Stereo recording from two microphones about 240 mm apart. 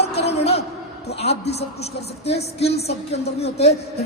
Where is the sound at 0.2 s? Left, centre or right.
Left.